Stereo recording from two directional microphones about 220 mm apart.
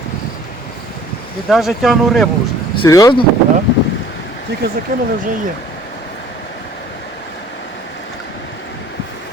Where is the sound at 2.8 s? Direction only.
15° left (ahead or behind).